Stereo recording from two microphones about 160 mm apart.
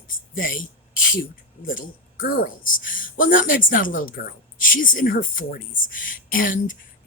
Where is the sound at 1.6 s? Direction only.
60° left (ahead or behind).